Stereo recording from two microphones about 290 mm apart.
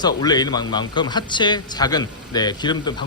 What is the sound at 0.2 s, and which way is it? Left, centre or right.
Speech, centre.